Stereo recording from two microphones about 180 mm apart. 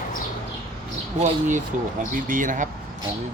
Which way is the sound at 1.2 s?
45° right (ahead or behind).